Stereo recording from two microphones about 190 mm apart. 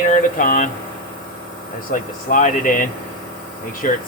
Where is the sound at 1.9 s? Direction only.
45° left (ahead or behind).